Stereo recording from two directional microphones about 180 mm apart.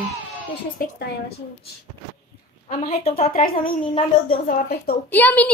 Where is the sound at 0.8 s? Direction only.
50° left (ahead or behind).